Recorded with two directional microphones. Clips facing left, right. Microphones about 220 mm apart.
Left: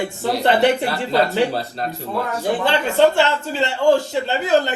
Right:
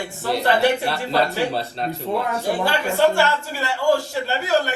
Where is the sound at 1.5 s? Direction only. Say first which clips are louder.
Even; centre (ahead or behind).